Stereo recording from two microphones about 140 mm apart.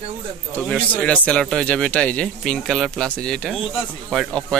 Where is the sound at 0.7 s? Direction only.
10° left (ahead or behind).